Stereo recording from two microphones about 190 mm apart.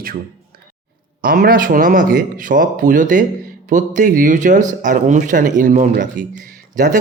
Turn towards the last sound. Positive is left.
turn(degrees=-45)  # may be behind; listen again after turning